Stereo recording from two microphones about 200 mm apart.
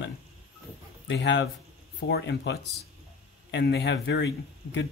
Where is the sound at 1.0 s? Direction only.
65° left (ahead or behind).